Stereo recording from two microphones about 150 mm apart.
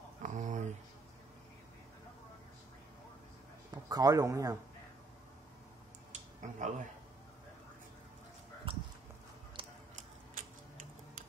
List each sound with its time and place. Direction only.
0.2 s a sound: 55° right (ahead or behind)
3.7 s speech: 25° right (ahead or behind)
6.1 s a sound: 55° right (ahead or behind)
8.7 s clip-clop: 35° right (ahead or behind)
9.6 s music: 35° right (ahead or behind)
10.3 s tick-tock: 70° right (ahead or behind)